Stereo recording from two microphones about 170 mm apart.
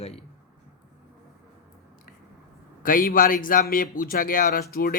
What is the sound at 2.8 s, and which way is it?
A man's voice, 55° left (ahead or behind).